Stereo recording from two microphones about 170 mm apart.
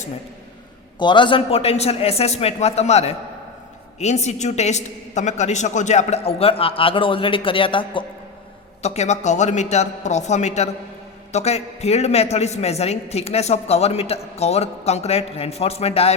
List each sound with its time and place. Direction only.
0.9 s a woman's voice: 25° left (ahead or behind)